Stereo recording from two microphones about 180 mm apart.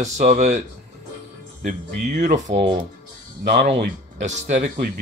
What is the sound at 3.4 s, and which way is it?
Speech, 65° right (ahead or behind).